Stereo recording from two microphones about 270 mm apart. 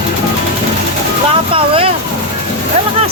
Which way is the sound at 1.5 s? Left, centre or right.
Centre.